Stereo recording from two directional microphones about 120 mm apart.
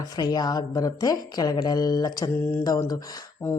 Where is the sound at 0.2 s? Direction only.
35° left (ahead or behind).